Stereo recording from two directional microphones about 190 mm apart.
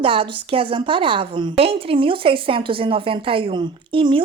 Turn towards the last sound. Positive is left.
turn(degrees=-25)  # may be behind; listen again after turning